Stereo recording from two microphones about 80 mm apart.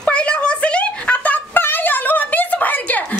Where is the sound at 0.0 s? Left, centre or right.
Centre.